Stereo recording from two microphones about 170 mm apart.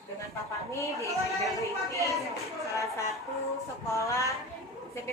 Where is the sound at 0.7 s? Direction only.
15° left (ahead or behind).